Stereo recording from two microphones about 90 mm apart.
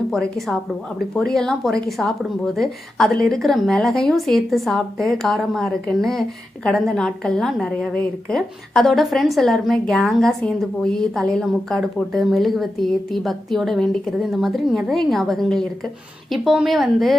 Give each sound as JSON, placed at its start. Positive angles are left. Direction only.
{"t": 0.1, "sound": "a woman's voice", "side_deg": 0}